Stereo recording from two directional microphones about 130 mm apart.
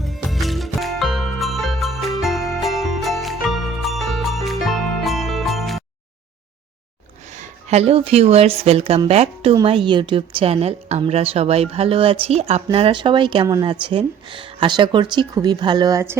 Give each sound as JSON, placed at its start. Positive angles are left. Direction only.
{"t": 0.0, "sound": "music", "side_deg": 0}
{"t": 7.3, "sound": "a woman's voice", "side_deg": -60}
{"t": 12.7, "sound": "speech", "side_deg": -40}